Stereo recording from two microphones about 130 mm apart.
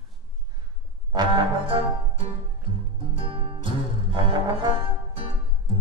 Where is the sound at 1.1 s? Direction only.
40° right (ahead or behind).